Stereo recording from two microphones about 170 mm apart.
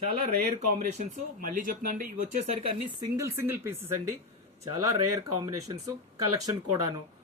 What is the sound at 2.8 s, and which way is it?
Speech, 25° right (ahead or behind).